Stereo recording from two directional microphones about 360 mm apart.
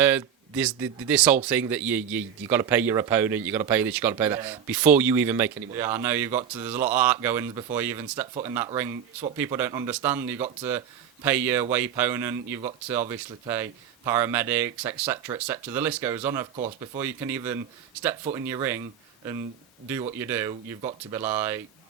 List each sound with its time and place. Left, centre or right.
0.0 s a man's voice: centre
16.6 s speech: centre
17.0 s a man's voice: centre
19.9 s speech: centre